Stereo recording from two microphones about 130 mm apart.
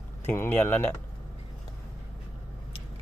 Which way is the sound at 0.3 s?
15° left (ahead or behind).